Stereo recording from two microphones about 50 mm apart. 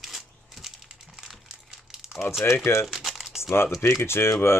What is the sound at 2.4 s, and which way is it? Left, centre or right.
Speech, left.